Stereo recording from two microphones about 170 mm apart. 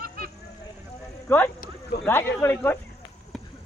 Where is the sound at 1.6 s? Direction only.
70° left (ahead or behind).